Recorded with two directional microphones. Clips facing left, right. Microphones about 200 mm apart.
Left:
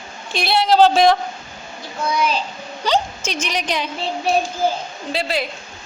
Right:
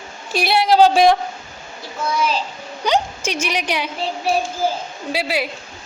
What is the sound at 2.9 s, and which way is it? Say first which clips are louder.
A child's voice: right 1 dB; 10° right (ahead or behind).